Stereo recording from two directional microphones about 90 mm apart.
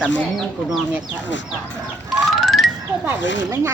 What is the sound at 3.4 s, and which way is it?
Speech, 30° right (ahead or behind).